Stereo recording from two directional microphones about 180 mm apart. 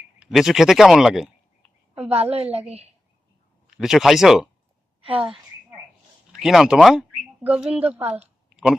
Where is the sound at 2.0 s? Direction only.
35° right (ahead or behind).